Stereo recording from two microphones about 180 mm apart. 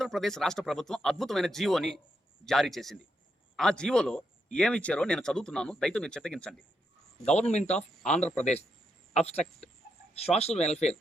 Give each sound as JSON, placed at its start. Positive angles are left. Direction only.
{"t": 0.0, "sound": "speech", "side_deg": 0}
{"t": 7.3, "sound": "speech", "side_deg": 40}
{"t": 7.7, "sound": "speech", "side_deg": 5}
{"t": 10.2, "sound": "speech", "side_deg": 35}